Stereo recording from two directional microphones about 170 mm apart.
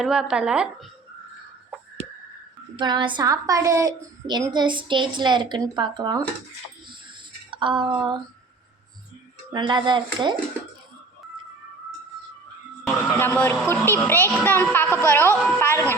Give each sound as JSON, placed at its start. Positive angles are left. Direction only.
{"t": 0.0, "sound": "speech", "side_deg": -5}
{"t": 2.7, "sound": "a woman's voice", "side_deg": -25}
{"t": 6.8, "sound": "a sound", "side_deg": -30}
{"t": 9.5, "sound": "a woman's voice", "side_deg": -25}
{"t": 13.1, "sound": "a woman's voice", "side_deg": 10}